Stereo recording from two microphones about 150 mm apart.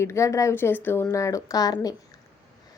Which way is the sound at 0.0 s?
20° left (ahead or behind).